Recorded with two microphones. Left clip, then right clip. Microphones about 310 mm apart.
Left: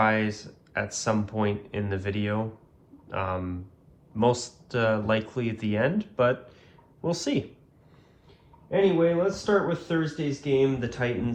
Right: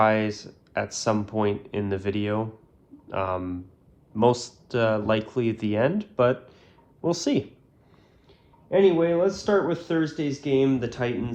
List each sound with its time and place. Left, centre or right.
0.0 s speech: centre
8.7 s speech: right